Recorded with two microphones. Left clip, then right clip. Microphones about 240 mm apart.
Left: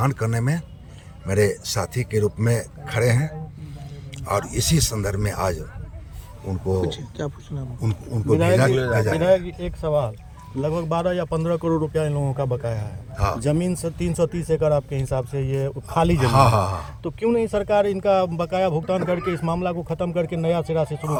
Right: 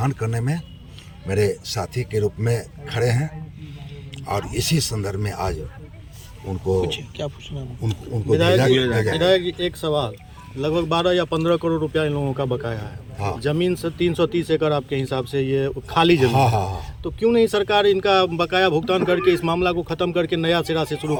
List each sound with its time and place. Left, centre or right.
0.0 s speech: centre
4.5 s speech: centre
6.8 s speech: left
10.6 s speech: left
16.4 s speech: centre
17.0 s speech: left